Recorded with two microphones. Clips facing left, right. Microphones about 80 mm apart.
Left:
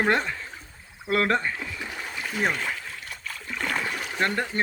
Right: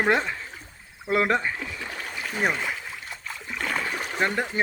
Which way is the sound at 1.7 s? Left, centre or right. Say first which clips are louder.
Even; centre.